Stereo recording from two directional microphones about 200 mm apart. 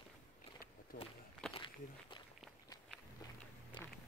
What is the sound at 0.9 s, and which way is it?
Speech, 45° left (ahead or behind).